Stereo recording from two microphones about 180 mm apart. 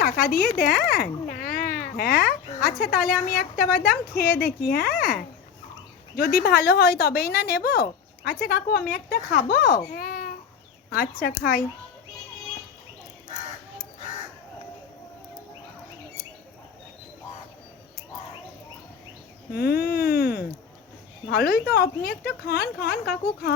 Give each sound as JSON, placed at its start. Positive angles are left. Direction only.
{"t": 0.0, "sound": "speech", "side_deg": 55}
{"t": 6.1, "sound": "speech", "side_deg": 55}
{"t": 19.5, "sound": "speech", "side_deg": 55}